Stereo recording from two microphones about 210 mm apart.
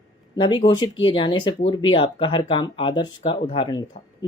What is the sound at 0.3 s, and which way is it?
A man's voice, 20° left (ahead or behind).